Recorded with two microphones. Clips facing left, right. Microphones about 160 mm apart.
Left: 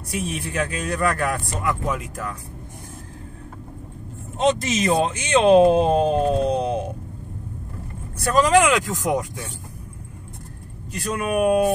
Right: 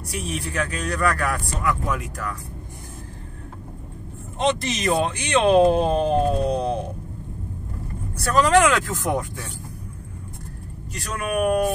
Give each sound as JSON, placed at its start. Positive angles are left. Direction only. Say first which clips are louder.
{"t": 0.1, "sound": "speech", "louder": "left 2 dB", "side_deg": 20}
{"t": 4.8, "sound": "speech", "louder": "even", "side_deg": 20}
{"t": 8.2, "sound": "speech", "louder": "even", "side_deg": 15}
{"t": 11.1, "sound": "speech", "louder": "left 2 dB", "side_deg": 25}